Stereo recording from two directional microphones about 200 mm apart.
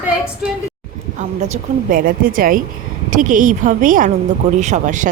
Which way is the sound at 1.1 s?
40° right (ahead or behind).